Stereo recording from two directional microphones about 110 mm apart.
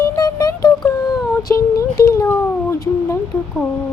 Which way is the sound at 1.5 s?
20° left (ahead or behind).